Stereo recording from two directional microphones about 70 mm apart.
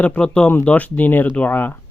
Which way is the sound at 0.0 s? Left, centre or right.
Centre.